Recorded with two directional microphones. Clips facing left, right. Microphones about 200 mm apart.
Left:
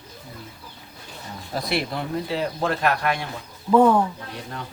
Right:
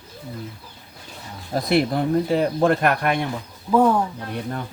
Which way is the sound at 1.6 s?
45° right (ahead or behind).